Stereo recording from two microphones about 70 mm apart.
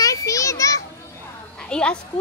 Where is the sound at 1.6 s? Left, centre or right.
Centre.